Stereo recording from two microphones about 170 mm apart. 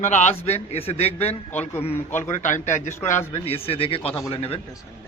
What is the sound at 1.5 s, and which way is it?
Speech, 10° left (ahead or behind).